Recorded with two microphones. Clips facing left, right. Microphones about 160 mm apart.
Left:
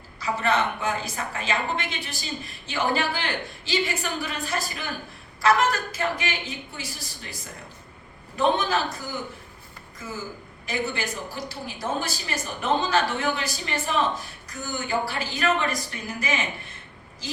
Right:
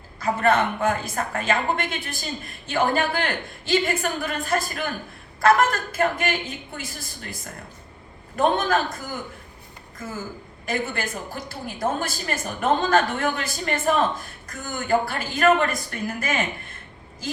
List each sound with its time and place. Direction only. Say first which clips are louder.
0.2 s a woman's voice: right 4 dB; 50° right (ahead or behind)
10.7 s a woman's voice: right 2 dB; 50° right (ahead or behind)